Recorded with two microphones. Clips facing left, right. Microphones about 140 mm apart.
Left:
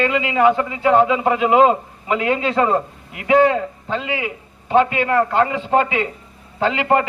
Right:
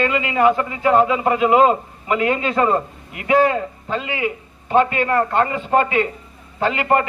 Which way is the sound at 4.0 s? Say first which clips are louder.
Right 3 dB; 15° left (ahead or behind).